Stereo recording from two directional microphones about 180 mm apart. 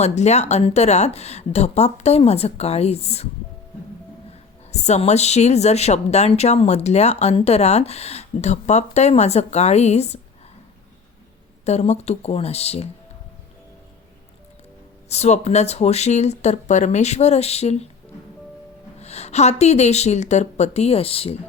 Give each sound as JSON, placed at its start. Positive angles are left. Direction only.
{"t": 0.0, "sound": "a woman's voice", "side_deg": 40}
{"t": 4.7, "sound": "a woman's voice", "side_deg": 40}
{"t": 11.6, "sound": "a woman's voice", "side_deg": 40}
{"t": 15.1, "sound": "a woman's voice", "side_deg": 35}
{"t": 18.9, "sound": "a woman's voice", "side_deg": 35}